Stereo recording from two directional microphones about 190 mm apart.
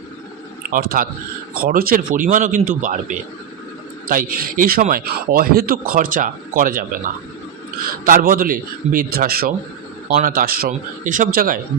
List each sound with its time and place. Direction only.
0.7 s a man's voice: 50° right (ahead or behind)
8.0 s a man's voice: 45° right (ahead or behind)